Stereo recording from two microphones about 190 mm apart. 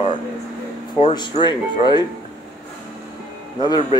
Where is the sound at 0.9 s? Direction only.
25° left (ahead or behind).